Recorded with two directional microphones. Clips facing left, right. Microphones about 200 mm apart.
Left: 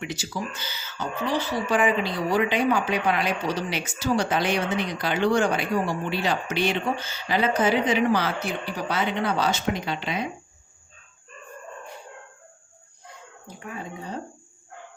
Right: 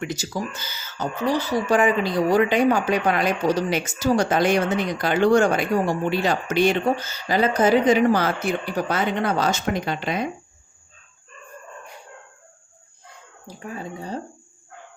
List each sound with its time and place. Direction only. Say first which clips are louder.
0.0 s speech: right 4 dB; 45° right (ahead or behind)
13.6 s speech: right 3 dB; 35° right (ahead or behind)